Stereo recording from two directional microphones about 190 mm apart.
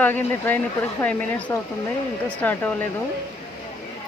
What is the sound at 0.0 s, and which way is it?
Speech, 10° left (ahead or behind).